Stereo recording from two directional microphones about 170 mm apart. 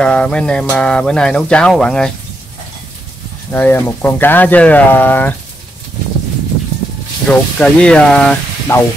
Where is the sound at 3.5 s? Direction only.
10° left (ahead or behind).